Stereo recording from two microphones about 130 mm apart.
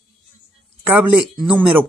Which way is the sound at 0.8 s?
10° right (ahead or behind).